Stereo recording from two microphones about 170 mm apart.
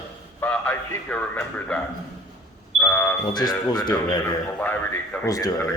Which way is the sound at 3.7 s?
25° left (ahead or behind).